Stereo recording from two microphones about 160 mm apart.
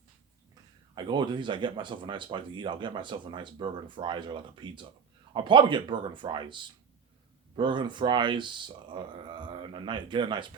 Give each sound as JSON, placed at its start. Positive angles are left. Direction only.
{"t": 0.9, "sound": "speech", "side_deg": -30}